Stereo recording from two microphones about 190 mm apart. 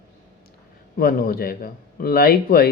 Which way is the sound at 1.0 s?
50° left (ahead or behind).